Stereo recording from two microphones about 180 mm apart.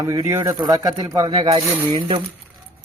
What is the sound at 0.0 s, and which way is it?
Speech, 20° right (ahead or behind).